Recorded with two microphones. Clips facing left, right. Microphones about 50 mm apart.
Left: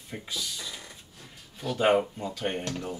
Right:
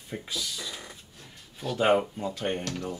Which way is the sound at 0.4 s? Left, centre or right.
Centre.